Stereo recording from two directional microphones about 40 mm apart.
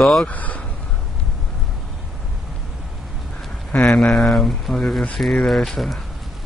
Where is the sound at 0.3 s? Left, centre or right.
Left.